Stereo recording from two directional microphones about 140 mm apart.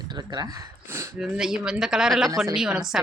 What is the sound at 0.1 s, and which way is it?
Speech, 30° right (ahead or behind).